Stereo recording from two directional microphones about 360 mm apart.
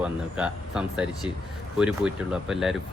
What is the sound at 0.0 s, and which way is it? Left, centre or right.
Speech, centre.